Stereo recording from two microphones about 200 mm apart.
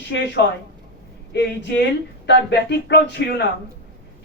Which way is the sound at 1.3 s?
60° left (ahead or behind).